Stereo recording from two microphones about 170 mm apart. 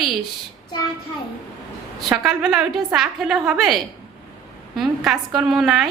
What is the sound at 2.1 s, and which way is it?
A woman's voice, 5° right (ahead or behind).